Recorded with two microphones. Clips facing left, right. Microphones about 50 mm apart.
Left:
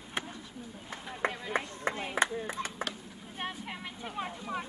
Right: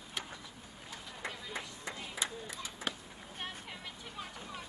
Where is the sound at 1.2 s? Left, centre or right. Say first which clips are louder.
Left 10 dB; left.